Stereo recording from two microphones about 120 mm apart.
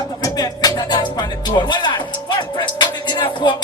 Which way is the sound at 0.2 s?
30° left (ahead or behind).